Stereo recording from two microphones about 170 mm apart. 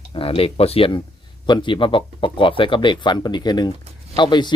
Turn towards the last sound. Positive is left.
turn(degrees=25)  # may be behind; listen again after turning